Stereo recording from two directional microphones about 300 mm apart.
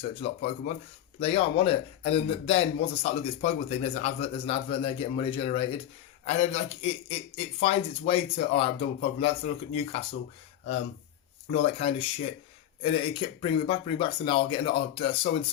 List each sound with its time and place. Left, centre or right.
0.1 s speech: centre
11.6 s speech: centre